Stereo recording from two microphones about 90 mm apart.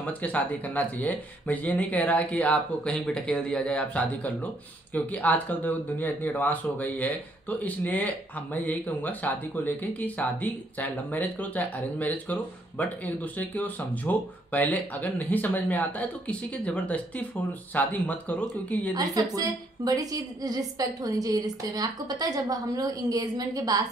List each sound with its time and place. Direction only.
0.0 s speech: 15° left (ahead or behind)
18.9 s a woman's voice: 45° right (ahead or behind)